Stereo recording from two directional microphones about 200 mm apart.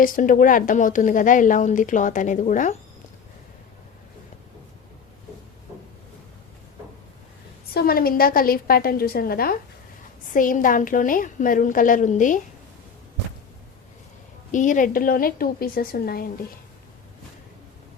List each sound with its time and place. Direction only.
0.0 s a woman's voice: 40° left (ahead or behind)
7.7 s a woman's voice: 50° left (ahead or behind)
14.5 s a woman's voice: 40° left (ahead or behind)